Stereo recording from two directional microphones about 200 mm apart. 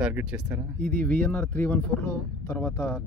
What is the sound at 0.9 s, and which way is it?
Speech, 10° left (ahead or behind).